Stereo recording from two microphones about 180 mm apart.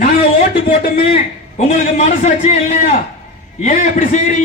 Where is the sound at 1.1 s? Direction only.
40° left (ahead or behind).